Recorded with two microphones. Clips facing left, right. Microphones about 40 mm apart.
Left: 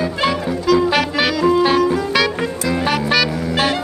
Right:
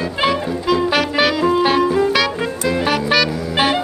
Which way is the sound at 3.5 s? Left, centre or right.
Centre.